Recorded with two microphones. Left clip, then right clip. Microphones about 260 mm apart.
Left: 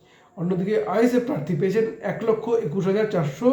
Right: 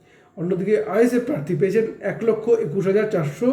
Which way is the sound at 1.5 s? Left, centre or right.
Left.